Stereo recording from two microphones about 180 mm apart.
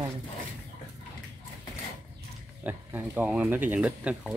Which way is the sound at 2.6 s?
10° right (ahead or behind).